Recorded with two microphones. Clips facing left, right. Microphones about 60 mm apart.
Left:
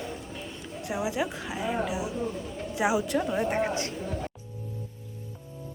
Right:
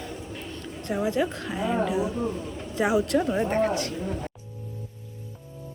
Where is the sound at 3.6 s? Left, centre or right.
Left.